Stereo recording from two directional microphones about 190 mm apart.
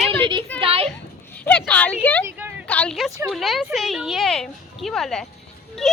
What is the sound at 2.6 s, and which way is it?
A woman's voice, 5° left (ahead or behind).